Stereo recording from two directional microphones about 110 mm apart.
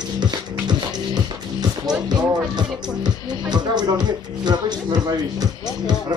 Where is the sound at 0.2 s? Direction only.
40° right (ahead or behind).